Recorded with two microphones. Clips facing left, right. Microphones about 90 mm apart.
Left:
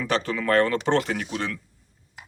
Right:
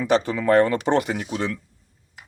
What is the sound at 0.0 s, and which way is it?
Speech, 15° right (ahead or behind).